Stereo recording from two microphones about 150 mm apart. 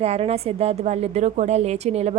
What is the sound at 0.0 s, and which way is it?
A woman's voice, 45° right (ahead or behind).